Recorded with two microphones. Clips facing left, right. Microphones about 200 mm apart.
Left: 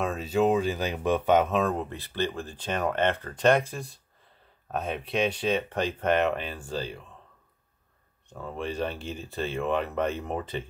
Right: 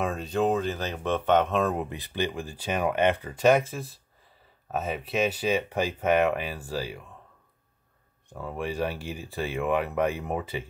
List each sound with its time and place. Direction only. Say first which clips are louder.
0.0 s speech: left 1 dB; centre (ahead or behind)
1.8 s speech: even; 15° right (ahead or behind)
8.3 s speech: right 1 dB; 10° right (ahead or behind)